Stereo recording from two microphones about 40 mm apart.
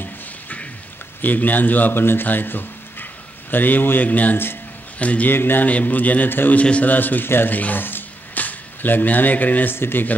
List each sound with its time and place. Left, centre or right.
1.2 s a man's voice: left
2.0 s speech: left
2.2 s a sound: left
4.0 s a man's voice: left
5.3 s a man's voice: left
5.7 s a man's voice: left
6.2 s a man's voice: left
6.5 s a man's voice: left
6.9 s a man's voice: left
7.4 s a sound: left
8.5 s speech: left
9.7 s a man's voice: left